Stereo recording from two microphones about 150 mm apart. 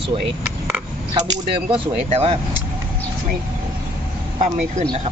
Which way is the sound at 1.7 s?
40° right (ahead or behind).